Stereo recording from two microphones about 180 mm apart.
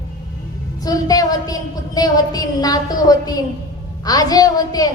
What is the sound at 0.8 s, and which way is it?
A woman's voice, 20° left (ahead or behind).